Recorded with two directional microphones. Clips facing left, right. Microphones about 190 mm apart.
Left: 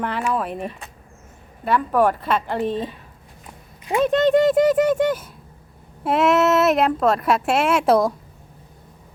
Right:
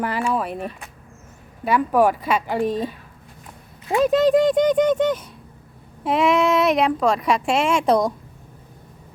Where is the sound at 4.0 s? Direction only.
Centre (ahead or behind).